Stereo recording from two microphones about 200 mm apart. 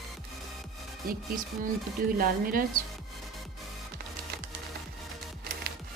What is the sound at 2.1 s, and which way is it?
Speech, 45° right (ahead or behind).